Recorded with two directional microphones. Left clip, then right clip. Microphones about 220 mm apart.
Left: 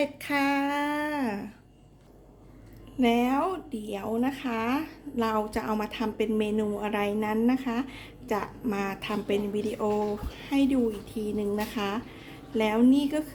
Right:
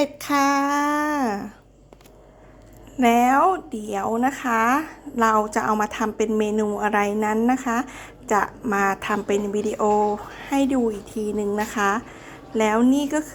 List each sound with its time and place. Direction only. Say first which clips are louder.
0.0 s speech: right 7 dB; 20° right (ahead or behind)
3.0 s a woman's voice: right 9 dB; 15° right (ahead or behind)